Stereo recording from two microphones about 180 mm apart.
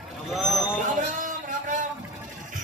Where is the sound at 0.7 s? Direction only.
45° right (ahead or behind).